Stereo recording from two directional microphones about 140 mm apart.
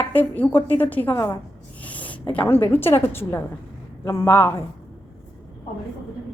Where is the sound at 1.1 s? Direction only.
25° left (ahead or behind).